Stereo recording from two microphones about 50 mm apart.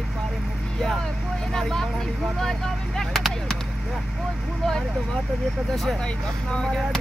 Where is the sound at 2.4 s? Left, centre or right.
Centre.